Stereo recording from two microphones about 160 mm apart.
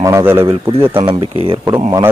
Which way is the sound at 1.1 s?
35° right (ahead or behind).